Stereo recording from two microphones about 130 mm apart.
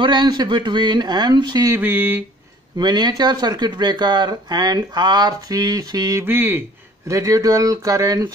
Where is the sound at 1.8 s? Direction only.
15° right (ahead or behind).